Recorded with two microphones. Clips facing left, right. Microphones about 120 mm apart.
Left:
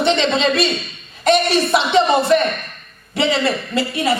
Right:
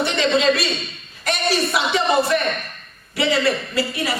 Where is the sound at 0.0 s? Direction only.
25° left (ahead or behind).